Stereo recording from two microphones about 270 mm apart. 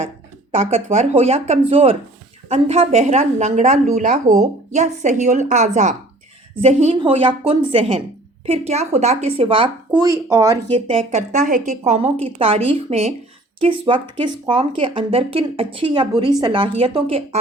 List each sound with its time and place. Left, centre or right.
0.5 s speech: right
10.8 s speech: right